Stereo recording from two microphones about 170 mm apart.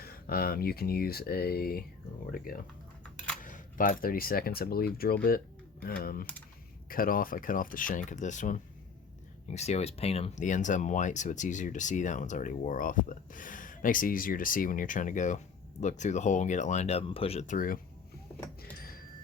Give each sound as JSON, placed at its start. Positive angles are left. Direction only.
{"t": 0.0, "sound": "speech", "side_deg": 60}
{"t": 18.6, "sound": "music", "side_deg": 60}